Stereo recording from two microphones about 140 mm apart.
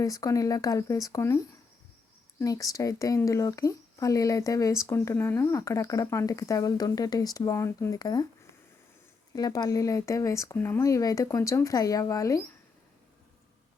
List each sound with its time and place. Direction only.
0.0 s speech: 25° left (ahead or behind)
9.3 s speech: 30° left (ahead or behind)